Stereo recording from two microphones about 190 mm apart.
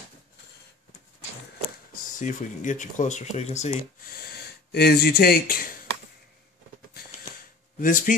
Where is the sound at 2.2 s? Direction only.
40° left (ahead or behind).